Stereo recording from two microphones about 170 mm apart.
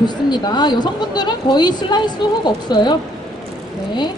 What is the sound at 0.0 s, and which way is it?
A woman's voice, 25° left (ahead or behind).